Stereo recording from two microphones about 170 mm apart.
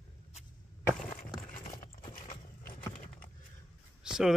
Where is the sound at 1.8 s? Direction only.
25° left (ahead or behind).